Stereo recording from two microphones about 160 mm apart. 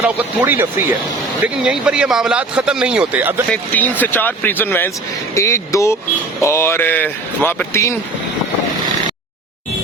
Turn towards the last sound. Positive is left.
turn(degrees=15)  # may be behind; listen again after turning